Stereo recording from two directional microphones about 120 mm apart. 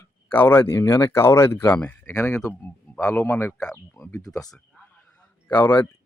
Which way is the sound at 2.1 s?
25° left (ahead or behind).